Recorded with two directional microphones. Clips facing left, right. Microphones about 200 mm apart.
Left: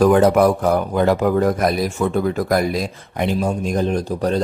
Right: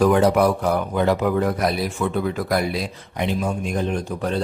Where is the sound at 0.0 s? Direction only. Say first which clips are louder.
Left 3 dB; 50° left (ahead or behind).